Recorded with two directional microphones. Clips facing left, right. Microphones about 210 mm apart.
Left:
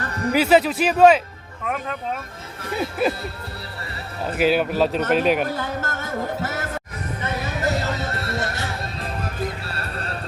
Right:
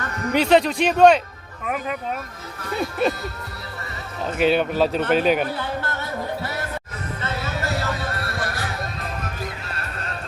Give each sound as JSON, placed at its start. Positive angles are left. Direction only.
{"t": 0.0, "sound": "music", "side_deg": 35}
{"t": 0.3, "sound": "speech", "side_deg": 5}
{"t": 3.0, "sound": "speech", "side_deg": 5}
{"t": 4.4, "sound": "speech", "side_deg": 5}
{"t": 5.5, "sound": "music", "side_deg": 45}
{"t": 7.2, "sound": "a sound", "side_deg": 20}
{"t": 9.6, "sound": "clip-clop", "side_deg": 35}